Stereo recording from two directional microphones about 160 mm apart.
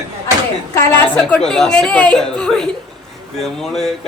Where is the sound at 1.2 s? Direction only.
5° left (ahead or behind).